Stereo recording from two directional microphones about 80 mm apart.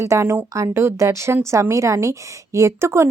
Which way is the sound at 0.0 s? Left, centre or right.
Right.